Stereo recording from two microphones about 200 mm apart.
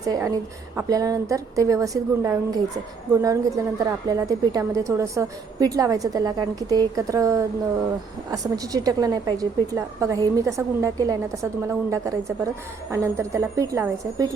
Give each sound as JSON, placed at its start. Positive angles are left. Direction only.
{"t": 0.0, "sound": "a woman's voice", "side_deg": -15}